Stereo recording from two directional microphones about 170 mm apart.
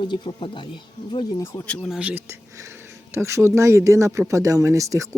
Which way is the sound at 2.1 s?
15° right (ahead or behind).